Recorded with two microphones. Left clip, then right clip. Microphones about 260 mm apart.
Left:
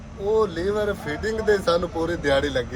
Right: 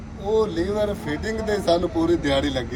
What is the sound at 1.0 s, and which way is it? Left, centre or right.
Speech, left.